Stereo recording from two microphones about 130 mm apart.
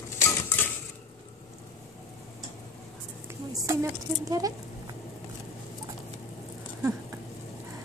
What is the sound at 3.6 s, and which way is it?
Speech, 25° right (ahead or behind).